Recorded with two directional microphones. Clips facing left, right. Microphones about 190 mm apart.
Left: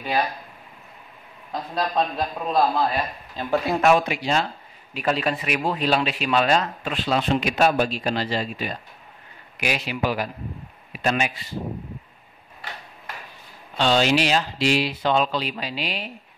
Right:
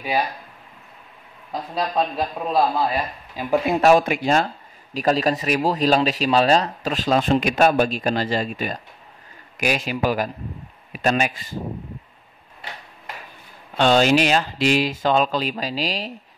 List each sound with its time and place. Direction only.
1.5 s a man's voice: 5° right (ahead or behind)
3.8 s speech: 45° right (ahead or behind)
4.9 s speech: 40° right (ahead or behind)
13.7 s speech: 50° right (ahead or behind)